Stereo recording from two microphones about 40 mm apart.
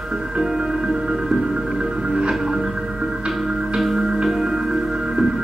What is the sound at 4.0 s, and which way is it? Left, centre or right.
Music, centre.